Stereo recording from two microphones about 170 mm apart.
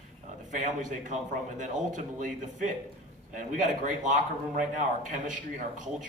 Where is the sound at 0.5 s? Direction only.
45° right (ahead or behind).